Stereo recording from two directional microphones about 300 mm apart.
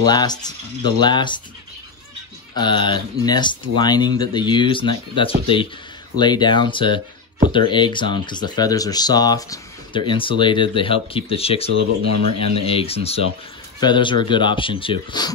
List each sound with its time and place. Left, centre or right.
0.0 s speech: centre
2.5 s speech: centre
11.7 s speech: right
12.6 s speech: centre